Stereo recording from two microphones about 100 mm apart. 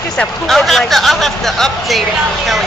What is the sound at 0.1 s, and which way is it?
Speech, 5° left (ahead or behind).